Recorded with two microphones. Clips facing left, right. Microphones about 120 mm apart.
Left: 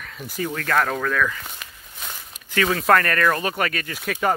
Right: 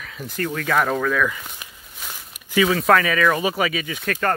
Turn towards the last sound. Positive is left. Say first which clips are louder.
# even
turn(degrees=5)  # may be behind; listen again after turning